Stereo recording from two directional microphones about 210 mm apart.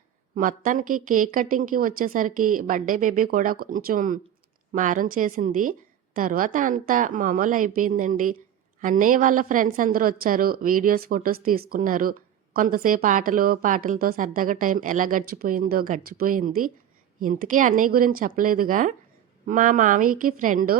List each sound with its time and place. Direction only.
0.3 s a woman's voice: 40° right (ahead or behind)